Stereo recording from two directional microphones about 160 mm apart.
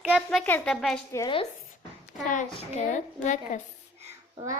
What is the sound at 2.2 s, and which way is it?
A child's voice, 50° left (ahead or behind).